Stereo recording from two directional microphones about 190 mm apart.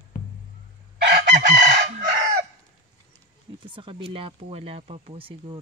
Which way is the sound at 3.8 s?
25° right (ahead or behind).